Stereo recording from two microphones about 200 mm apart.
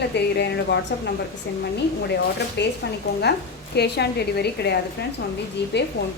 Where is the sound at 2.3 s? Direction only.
55° left (ahead or behind).